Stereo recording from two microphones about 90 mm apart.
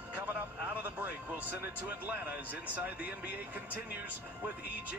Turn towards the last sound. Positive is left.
turn(degrees=-20)  # may be behind; listen again after turning